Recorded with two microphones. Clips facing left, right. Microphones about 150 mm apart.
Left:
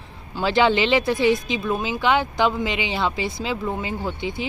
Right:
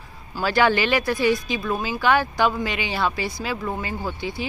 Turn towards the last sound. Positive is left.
turn(degrees=20)  # may be behind; listen again after turning